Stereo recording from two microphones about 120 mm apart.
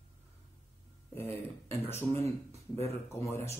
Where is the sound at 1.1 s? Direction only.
20° left (ahead or behind).